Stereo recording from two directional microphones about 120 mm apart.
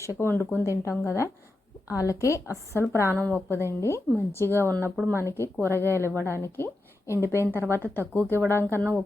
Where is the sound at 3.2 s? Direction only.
15° left (ahead or behind).